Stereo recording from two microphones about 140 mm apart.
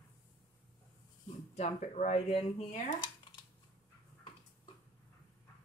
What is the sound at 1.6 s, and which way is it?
Speech, 55° left (ahead or behind).